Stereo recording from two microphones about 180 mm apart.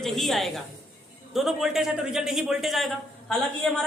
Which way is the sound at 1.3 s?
Centre (ahead or behind).